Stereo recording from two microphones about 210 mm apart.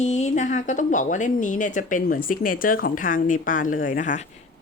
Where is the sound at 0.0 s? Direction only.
35° left (ahead or behind).